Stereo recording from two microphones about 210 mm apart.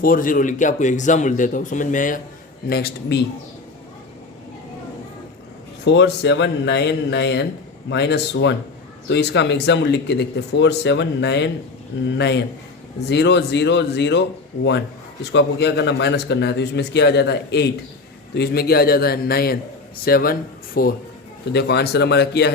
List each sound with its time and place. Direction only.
0.0 s a man's voice: 40° left (ahead or behind)
5.8 s a man's voice: 55° left (ahead or behind)